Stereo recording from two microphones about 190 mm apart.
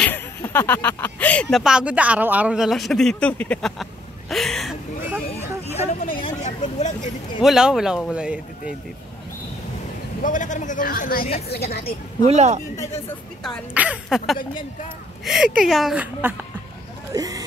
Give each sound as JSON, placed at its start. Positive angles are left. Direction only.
{"t": 0.0, "sound": "speech", "side_deg": 10}
{"t": 6.1, "sound": "vehicle", "side_deg": 30}
{"t": 7.4, "sound": "speech", "side_deg": 0}
{"t": 10.2, "sound": "a man's voice", "side_deg": 40}
{"t": 12.3, "sound": "a man's voice", "side_deg": -35}
{"t": 13.4, "sound": "speech", "side_deg": -5}
{"t": 17.1, "sound": "vehicle", "side_deg": -20}